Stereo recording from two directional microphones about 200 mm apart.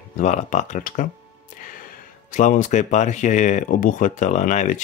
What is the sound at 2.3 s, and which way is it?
Speech, 40° left (ahead or behind).